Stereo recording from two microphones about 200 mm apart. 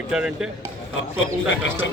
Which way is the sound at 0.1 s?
5° right (ahead or behind).